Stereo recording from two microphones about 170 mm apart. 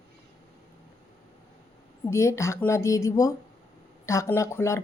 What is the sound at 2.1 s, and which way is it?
Speech, 15° left (ahead or behind).